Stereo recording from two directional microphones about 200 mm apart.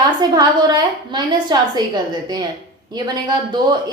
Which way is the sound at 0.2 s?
20° right (ahead or behind).